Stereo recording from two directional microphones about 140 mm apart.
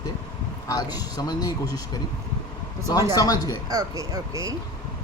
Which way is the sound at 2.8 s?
30° left (ahead or behind).